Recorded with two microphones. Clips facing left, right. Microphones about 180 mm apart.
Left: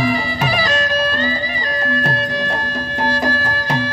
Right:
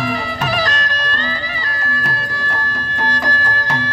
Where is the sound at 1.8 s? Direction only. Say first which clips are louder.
Left 6 dB; 25° left (ahead or behind).